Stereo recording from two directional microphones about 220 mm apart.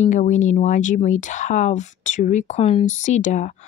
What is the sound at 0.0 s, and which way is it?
Speech, 35° left (ahead or behind).